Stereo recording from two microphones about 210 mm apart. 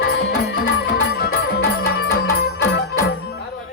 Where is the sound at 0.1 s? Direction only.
50° left (ahead or behind).